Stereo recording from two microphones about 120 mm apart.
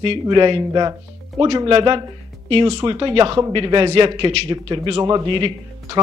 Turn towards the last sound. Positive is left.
turn(degrees=-40)  # may be behind; listen again after turning